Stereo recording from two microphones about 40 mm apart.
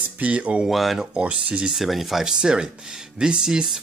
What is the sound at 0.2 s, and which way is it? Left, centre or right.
Speech, right.